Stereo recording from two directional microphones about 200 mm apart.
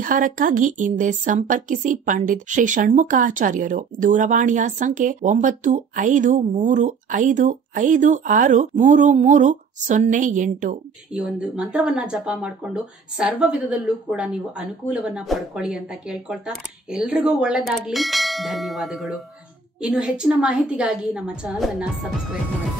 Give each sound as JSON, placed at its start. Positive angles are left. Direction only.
{"t": 0.0, "sound": "speech", "side_deg": -40}
{"t": 11.1, "sound": "a woman's voice", "side_deg": -5}